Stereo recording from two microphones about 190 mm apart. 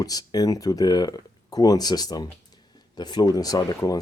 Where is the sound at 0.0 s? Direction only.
20° left (ahead or behind).